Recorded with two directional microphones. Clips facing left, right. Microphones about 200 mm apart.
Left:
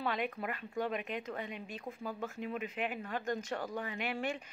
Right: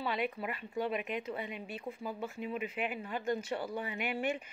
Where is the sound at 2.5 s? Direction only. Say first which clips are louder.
Right 2 dB; 5° right (ahead or behind).